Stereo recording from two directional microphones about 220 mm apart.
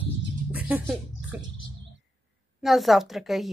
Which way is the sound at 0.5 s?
5° right (ahead or behind).